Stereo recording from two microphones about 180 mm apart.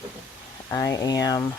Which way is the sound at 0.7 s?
20° left (ahead or behind).